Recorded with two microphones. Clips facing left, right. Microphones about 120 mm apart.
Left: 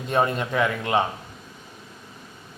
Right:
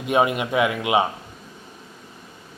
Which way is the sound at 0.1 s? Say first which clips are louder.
Right 3 dB; 10° right (ahead or behind).